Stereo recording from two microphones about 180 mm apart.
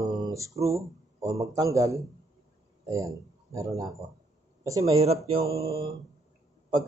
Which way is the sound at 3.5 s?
20° right (ahead or behind).